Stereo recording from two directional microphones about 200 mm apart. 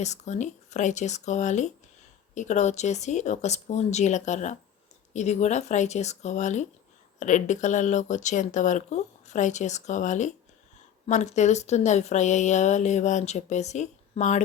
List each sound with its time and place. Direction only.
0.0 s speech: 35° left (ahead or behind)